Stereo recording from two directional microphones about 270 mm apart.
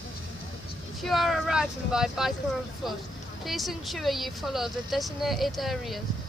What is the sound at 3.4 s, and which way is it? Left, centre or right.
Speech, centre.